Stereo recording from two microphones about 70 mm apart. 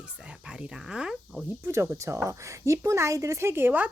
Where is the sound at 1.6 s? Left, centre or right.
Right.